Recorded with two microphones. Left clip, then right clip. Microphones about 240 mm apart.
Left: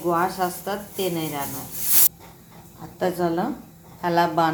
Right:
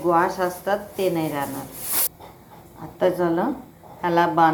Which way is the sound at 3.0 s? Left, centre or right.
Centre.